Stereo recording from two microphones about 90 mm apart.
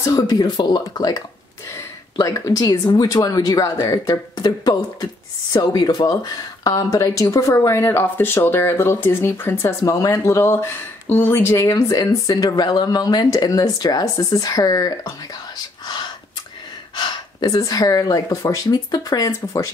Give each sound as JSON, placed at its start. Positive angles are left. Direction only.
{"t": 0.0, "sound": "speech", "side_deg": 45}
{"t": 11.6, "sound": "speech", "side_deg": 40}
{"t": 16.9, "sound": "speech", "side_deg": 55}